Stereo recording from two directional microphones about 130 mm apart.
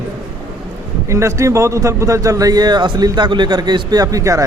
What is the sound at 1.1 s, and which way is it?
A man's voice, 20° right (ahead or behind).